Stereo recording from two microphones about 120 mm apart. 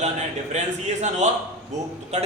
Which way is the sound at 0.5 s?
75° right (ahead or behind).